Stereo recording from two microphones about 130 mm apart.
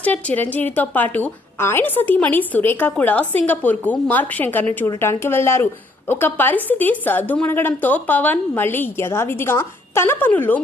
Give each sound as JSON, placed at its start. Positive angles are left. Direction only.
{"t": 0.0, "sound": "a woman's voice", "side_deg": 10}